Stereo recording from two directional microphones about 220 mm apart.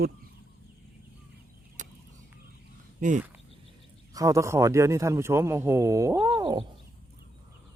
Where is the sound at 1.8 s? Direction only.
35° right (ahead or behind).